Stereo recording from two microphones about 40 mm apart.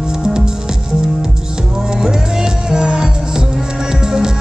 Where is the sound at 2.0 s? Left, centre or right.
Centre.